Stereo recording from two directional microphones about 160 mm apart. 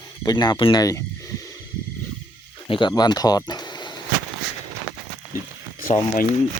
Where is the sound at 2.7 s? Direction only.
30° left (ahead or behind).